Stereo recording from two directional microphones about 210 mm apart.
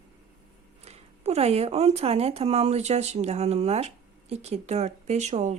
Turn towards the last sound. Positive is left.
turn(degrees=-35)  # may be behind; listen again after turning